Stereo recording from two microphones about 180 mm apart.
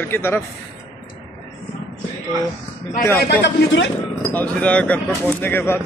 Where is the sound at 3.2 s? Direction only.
75° left (ahead or behind).